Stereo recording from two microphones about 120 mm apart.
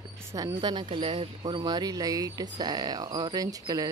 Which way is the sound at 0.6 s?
40° right (ahead or behind).